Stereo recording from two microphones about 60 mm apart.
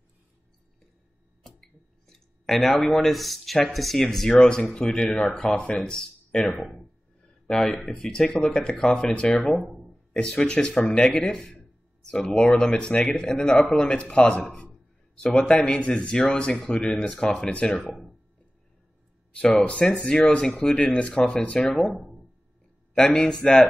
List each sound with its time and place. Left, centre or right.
2.0 s speech: centre
9.6 s a sound: centre
10.1 s speech: centre
17.8 s speech: centre
19.3 s speech: centre
22.9 s speech: centre